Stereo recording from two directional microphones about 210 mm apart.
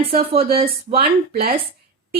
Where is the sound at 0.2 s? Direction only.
30° right (ahead or behind).